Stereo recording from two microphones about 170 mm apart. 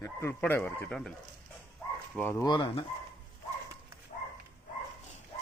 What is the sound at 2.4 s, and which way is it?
Speech, 25° left (ahead or behind).